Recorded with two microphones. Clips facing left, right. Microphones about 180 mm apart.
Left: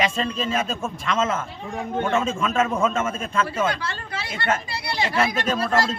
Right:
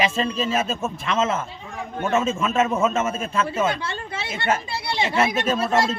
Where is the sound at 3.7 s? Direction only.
25° right (ahead or behind).